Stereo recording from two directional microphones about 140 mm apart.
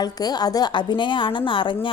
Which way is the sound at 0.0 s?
30° left (ahead or behind).